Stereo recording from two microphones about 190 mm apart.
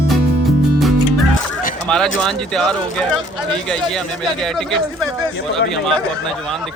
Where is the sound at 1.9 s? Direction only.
5° left (ahead or behind).